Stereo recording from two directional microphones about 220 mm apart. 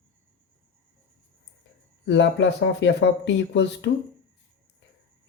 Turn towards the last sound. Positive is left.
turn(degrees=55)  # may be behind; listen again after turning